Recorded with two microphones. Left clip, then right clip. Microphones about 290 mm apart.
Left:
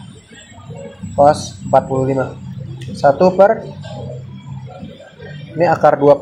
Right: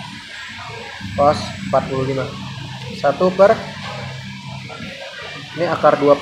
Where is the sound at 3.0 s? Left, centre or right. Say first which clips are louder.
Left 3 dB; centre.